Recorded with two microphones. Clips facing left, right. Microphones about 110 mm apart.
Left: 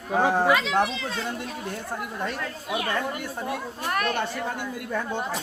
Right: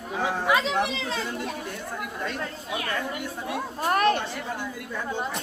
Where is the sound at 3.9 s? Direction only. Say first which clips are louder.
Right 5 dB; 35° right (ahead or behind).